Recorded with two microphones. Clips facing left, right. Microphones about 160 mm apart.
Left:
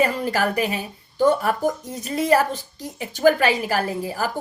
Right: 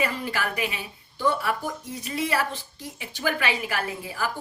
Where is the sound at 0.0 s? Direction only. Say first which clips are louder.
Left 7 dB; 40° left (ahead or behind).